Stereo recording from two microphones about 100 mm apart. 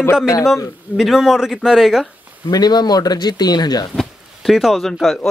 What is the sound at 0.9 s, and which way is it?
Speech, 5° right (ahead or behind).